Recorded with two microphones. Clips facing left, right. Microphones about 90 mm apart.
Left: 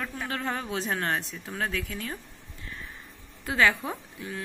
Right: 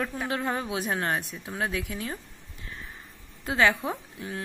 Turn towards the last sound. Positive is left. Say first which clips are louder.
# right 2 dB
turn(degrees=-25)  # may be behind; listen again after turning